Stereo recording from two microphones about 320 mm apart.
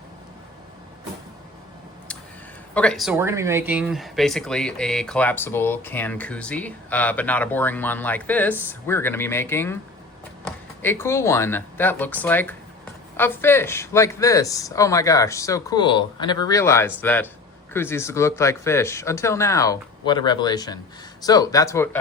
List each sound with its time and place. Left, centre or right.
2.7 s speech: centre
10.8 s speech: centre